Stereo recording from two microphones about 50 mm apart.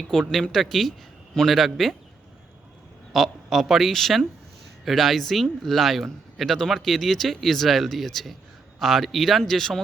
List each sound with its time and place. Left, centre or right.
0.1 s speech: centre
3.1 s speech: centre